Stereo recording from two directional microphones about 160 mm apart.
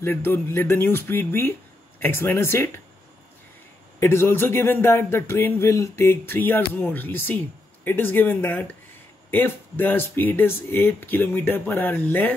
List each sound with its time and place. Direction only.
0.0 s speech: 15° left (ahead or behind)
4.0 s speech: 15° left (ahead or behind)